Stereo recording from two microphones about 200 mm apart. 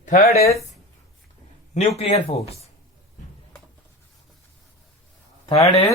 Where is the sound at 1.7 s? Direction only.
30° left (ahead or behind).